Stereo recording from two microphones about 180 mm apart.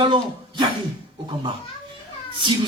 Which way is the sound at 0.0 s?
25° right (ahead or behind).